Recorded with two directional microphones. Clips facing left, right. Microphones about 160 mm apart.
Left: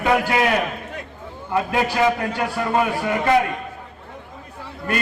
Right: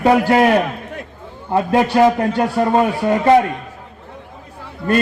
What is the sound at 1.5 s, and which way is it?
Speech, 35° right (ahead or behind).